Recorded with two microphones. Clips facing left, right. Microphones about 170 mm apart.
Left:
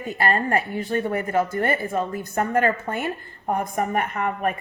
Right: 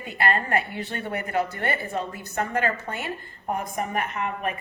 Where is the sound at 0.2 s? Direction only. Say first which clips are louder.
Left 2 dB; 40° left (ahead or behind).